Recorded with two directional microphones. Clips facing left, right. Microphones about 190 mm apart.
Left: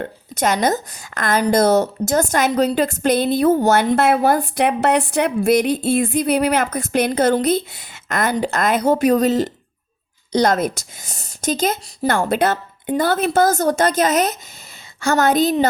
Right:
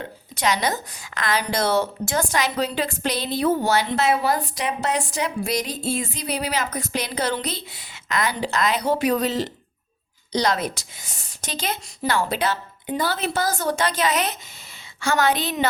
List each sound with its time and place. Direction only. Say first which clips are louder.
0.0 s a woman's voice: left 4 dB; 50° left (ahead or behind)